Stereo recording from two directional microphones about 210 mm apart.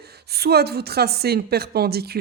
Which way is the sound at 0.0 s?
50° right (ahead or behind).